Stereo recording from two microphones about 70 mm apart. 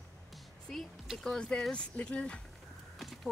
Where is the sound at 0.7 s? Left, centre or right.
Centre.